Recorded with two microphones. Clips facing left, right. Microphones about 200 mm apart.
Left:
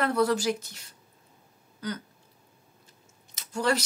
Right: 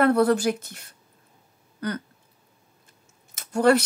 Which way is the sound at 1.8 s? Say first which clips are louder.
Right 5 dB; 60° right (ahead or behind).